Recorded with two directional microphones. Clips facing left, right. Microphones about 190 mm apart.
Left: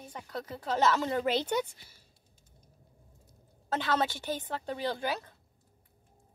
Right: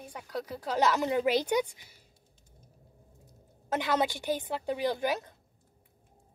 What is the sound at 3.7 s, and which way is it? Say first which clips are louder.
Speech: right 1 dB; 15° right (ahead or behind).